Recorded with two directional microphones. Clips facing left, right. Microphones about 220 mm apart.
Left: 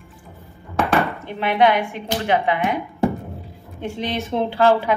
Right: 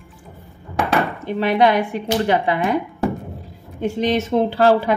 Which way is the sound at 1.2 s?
35° right (ahead or behind).